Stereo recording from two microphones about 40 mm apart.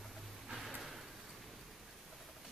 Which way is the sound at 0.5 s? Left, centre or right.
Centre.